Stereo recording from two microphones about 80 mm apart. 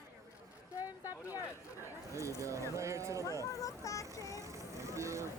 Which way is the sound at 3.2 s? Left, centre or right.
Left.